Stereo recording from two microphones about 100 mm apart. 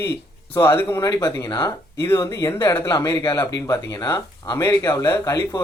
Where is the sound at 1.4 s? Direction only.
50° left (ahead or behind).